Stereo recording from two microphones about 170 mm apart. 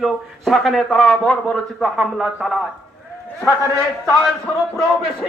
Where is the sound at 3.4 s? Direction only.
20° left (ahead or behind).